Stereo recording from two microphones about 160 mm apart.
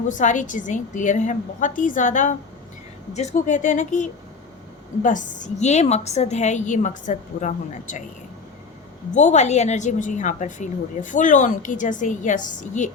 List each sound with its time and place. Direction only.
0.1 s a woman's voice: 50° left (ahead or behind)
5.0 s a woman's voice: 50° left (ahead or behind)
9.1 s a woman's voice: 45° left (ahead or behind)